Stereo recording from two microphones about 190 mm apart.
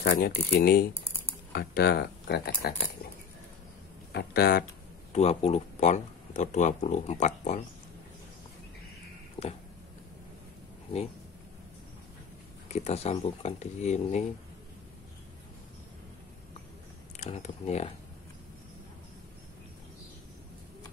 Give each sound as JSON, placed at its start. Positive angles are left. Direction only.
{"t": 0.0, "sound": "speech", "side_deg": 55}
{"t": 4.1, "sound": "speech", "side_deg": 55}
{"t": 5.1, "sound": "speech", "side_deg": 35}
{"t": 9.4, "sound": "a sound", "side_deg": 25}
{"t": 12.6, "sound": "speech", "side_deg": 35}
{"t": 17.2, "sound": "speech", "side_deg": 35}